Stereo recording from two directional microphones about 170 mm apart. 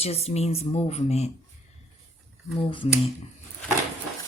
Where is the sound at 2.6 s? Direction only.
30° left (ahead or behind).